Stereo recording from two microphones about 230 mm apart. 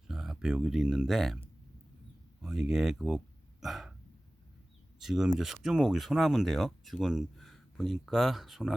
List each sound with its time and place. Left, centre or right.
0.1 s speech: centre
2.4 s speech: centre
3.6 s hiccup: centre
4.9 s speech: centre